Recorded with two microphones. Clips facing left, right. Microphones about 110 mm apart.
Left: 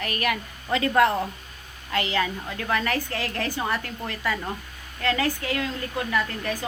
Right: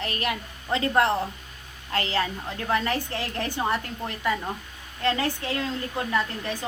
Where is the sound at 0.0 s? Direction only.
25° right (ahead or behind).